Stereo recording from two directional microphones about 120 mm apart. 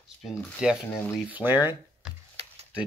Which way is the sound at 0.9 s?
15° left (ahead or behind).